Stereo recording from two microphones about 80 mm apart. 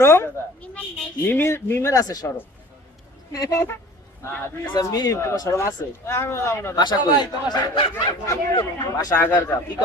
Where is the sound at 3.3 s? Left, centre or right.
Left.